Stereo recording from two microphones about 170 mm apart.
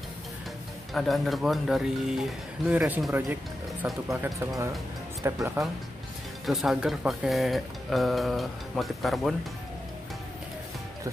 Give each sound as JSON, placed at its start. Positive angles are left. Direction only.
{"t": 0.9, "sound": "speech", "side_deg": 0}
{"t": 3.1, "sound": "speech", "side_deg": -15}
{"t": 5.2, "sound": "speech", "side_deg": -20}
{"t": 6.4, "sound": "speech", "side_deg": 0}